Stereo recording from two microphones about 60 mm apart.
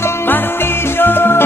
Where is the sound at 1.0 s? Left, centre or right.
Left.